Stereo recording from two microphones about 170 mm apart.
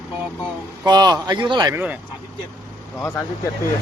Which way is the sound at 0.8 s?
25° right (ahead or behind).